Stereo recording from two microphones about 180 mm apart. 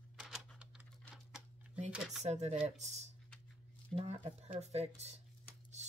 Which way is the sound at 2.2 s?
40° right (ahead or behind).